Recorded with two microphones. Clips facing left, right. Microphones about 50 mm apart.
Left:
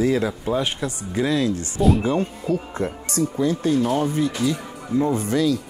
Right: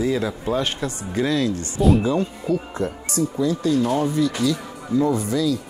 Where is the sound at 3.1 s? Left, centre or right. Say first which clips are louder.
Even; left.